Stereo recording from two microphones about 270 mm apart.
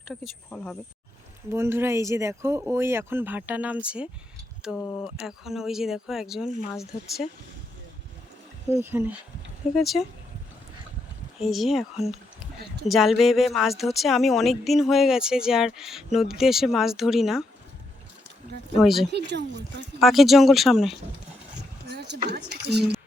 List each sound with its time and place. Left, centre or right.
0.0 s speech: centre
1.5 s speech: centre
8.7 s speech: centre
11.4 s speech: centre
12.9 s speech: centre
18.8 s speech: centre
19.1 s speech: right
20.0 s speech: centre
21.8 s vehicle: right
22.3 s speech: right